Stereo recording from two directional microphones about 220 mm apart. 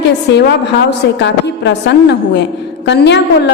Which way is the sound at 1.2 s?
50° left (ahead or behind).